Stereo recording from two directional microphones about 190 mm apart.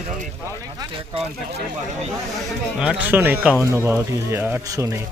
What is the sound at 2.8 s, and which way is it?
Speech, 5° right (ahead or behind).